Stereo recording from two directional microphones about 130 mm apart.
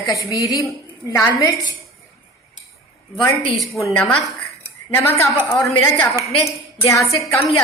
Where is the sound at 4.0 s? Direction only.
10° left (ahead or behind).